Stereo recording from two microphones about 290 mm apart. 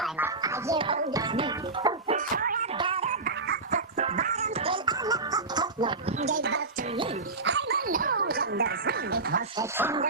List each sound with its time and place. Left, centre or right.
0.0 s speech: centre
2.1 s music: right
2.7 s music: centre
9.6 s speech: centre